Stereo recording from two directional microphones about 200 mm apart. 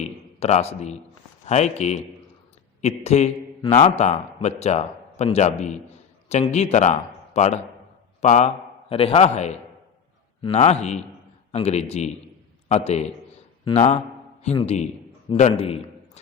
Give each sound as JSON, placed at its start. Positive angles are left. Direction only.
{"t": 0.0, "sound": "a man's voice", "side_deg": 35}